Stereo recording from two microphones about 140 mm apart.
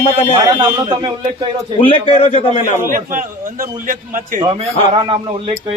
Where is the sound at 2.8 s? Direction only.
80° right.